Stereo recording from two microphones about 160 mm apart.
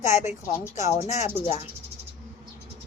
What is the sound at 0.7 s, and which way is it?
Speech, 45° left (ahead or behind).